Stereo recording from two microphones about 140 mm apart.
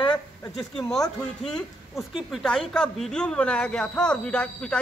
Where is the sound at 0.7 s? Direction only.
5° left (ahead or behind).